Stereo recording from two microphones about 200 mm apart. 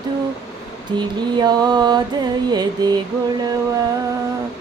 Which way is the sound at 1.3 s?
20° right (ahead or behind).